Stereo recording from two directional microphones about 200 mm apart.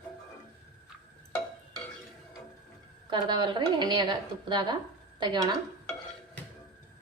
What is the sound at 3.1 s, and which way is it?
A woman's voice, 20° right (ahead or behind).